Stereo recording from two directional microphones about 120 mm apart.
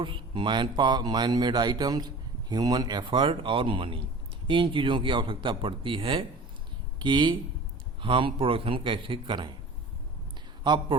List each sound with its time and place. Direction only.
0.0 s speech: 45° right (ahead or behind)
10.6 s speech: 40° right (ahead or behind)